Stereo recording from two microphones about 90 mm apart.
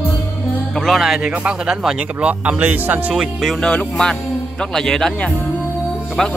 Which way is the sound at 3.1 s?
5° right (ahead or behind).